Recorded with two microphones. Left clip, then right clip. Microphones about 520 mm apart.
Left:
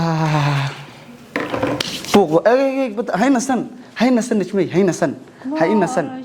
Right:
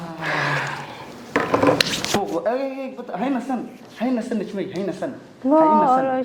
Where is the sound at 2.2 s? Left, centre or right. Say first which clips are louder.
Left 12 dB; left.